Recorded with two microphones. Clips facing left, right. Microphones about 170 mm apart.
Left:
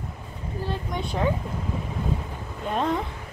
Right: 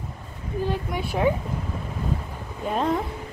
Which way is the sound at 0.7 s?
10° right (ahead or behind).